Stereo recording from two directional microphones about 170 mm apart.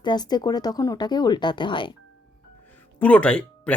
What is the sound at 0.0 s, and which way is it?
Speech, 25° left (ahead or behind).